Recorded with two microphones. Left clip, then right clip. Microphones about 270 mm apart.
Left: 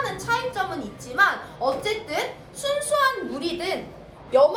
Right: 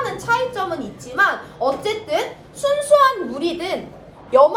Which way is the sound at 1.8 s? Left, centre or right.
Right.